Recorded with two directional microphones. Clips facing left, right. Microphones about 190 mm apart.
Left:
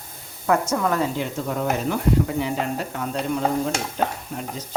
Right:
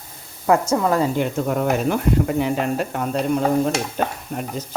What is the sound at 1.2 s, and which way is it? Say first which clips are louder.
Speech: right 5 dB; 55° right (ahead or behind).